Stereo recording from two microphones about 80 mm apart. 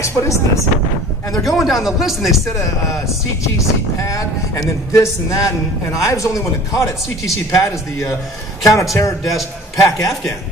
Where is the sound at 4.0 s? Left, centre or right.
Left.